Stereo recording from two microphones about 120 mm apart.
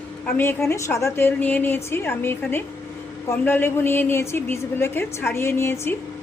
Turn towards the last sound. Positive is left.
turn(degrees=20)  # may be behind; listen again after turning